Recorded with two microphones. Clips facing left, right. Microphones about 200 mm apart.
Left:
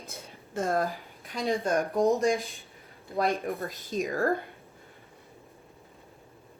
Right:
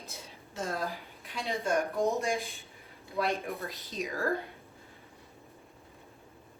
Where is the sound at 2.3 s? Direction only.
Centre (ahead or behind).